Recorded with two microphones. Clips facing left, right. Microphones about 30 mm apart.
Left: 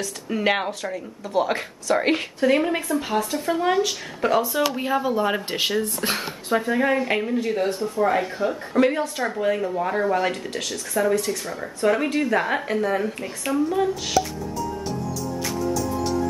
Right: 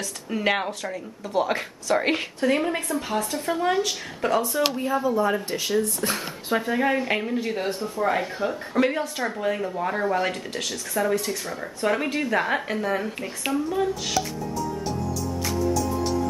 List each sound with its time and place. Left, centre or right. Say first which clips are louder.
0.0 s speech: left 2 dB; centre
4.7 s speech: left 1 dB; left
6.5 s speech: left 2 dB; centre